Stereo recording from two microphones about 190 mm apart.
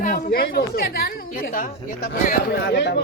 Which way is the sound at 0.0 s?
50° left (ahead or behind).